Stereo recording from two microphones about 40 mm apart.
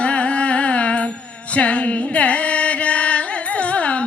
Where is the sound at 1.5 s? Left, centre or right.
Left.